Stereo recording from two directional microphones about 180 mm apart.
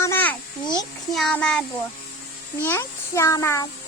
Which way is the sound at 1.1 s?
5° left (ahead or behind).